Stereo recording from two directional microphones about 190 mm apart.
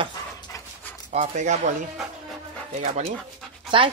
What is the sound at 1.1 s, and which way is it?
Speech, 40° right (ahead or behind).